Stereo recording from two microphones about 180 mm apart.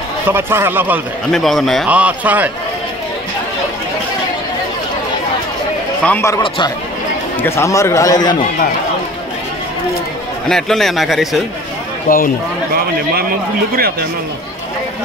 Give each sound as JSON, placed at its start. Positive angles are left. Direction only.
{"t": 0.3, "sound": "speech", "side_deg": -10}
{"t": 1.3, "sound": "a man's voice", "side_deg": 0}
{"t": 6.0, "sound": "a man's voice", "side_deg": 15}
{"t": 7.4, "sound": "a man's voice", "side_deg": 15}
{"t": 10.5, "sound": "a man's voice", "side_deg": 0}
{"t": 12.1, "sound": "speech", "side_deg": 50}